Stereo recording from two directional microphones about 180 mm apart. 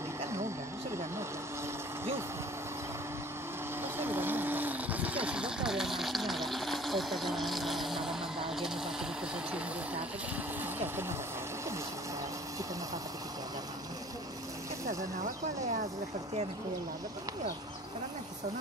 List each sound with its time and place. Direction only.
3.8 s vehicle: 10° right (ahead or behind)